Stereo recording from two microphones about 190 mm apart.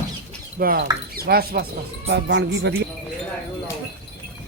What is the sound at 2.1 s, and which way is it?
Speech, 65° right (ahead or behind).